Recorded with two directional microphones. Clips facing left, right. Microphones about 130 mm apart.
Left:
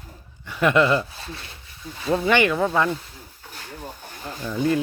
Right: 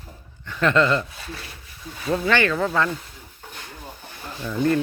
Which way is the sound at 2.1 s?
15° left (ahead or behind).